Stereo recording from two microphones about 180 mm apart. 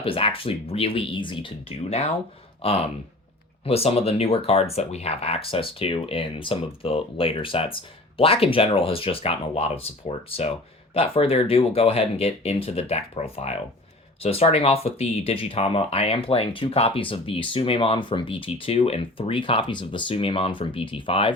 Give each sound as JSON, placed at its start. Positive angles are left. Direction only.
{"t": 0.0, "sound": "speech", "side_deg": 30}
{"t": 2.6, "sound": "a sound", "side_deg": 35}
{"t": 3.7, "sound": "speech", "side_deg": 35}